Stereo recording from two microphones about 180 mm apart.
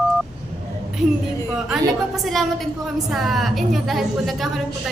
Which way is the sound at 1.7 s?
Centre (ahead or behind).